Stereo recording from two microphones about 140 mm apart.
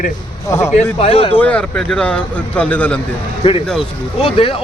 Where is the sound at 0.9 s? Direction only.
40° left (ahead or behind).